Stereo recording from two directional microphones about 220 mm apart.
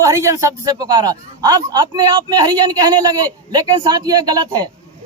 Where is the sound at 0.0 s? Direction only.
15° right (ahead or behind).